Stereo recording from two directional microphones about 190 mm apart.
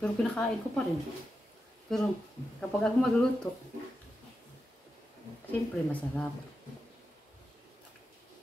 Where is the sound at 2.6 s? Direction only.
5° left (ahead or behind).